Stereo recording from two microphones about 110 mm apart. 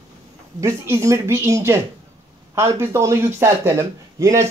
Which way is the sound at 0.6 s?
25° right (ahead or behind).